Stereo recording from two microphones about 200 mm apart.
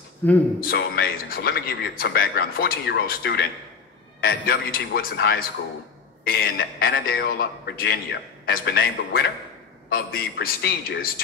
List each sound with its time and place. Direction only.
0.2 s a man's voice: 10° left (ahead or behind)
0.6 s a man's voice: 50° left (ahead or behind)